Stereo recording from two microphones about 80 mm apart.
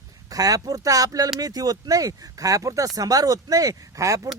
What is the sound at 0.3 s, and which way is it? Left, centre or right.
Speech, right.